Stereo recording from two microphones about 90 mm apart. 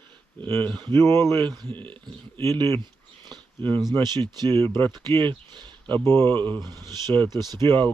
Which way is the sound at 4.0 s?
55° right (ahead or behind).